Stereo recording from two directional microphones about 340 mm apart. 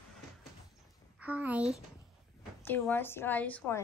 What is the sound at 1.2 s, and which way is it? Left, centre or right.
A woman's voice, centre.